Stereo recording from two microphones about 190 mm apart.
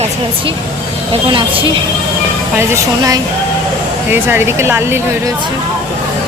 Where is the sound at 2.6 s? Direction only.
15° right (ahead or behind).